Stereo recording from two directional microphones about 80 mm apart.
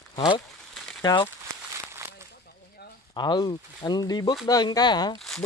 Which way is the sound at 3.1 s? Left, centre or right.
Left.